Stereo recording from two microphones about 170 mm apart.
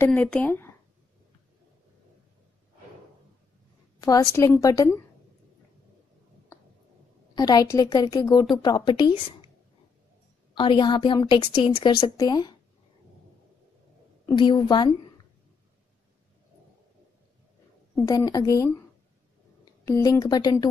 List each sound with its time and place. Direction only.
0.0 s speech: 5° left (ahead or behind)
4.0 s a woman's voice: 20° left (ahead or behind)
7.3 s a woman's voice: 25° left (ahead or behind)
10.5 s a woman's voice: 30° left (ahead or behind)
14.2 s a woman's voice: 25° left (ahead or behind)
17.9 s a woman's voice: 20° left (ahead or behind)